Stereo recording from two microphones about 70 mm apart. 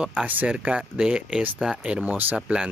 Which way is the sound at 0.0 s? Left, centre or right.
Centre.